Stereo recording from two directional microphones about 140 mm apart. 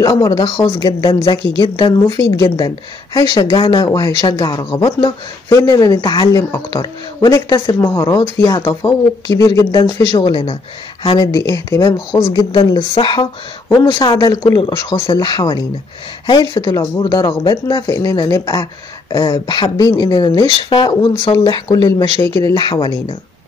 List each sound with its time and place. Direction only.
0.0 s speech: 25° left (ahead or behind)
10.1 s speech: 30° left (ahead or behind)
11.3 s speech: 20° left (ahead or behind)
12.5 s speech: 40° left (ahead or behind)